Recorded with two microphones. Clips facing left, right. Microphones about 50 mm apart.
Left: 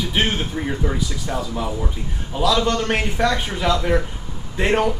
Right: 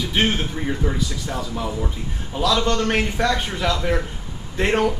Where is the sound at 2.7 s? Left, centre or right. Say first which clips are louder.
Even; centre.